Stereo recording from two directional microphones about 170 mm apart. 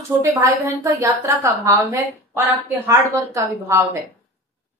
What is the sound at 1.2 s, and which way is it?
A woman's voice, 20° right (ahead or behind).